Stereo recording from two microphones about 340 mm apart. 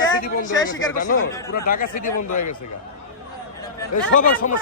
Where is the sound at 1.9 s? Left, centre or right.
Left.